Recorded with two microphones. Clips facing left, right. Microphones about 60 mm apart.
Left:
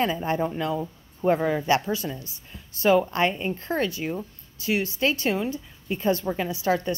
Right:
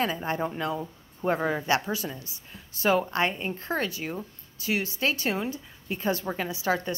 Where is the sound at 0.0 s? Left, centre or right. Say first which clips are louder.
Left 3 dB; centre.